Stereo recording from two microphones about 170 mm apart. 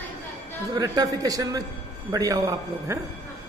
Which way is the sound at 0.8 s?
20° right (ahead or behind).